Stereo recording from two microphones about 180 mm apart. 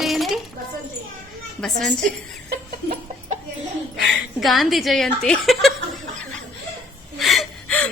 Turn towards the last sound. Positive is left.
turn(degrees=5)  # may be behind; listen again after turning